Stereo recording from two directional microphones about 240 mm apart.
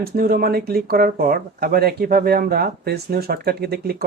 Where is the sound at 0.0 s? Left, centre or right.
Right.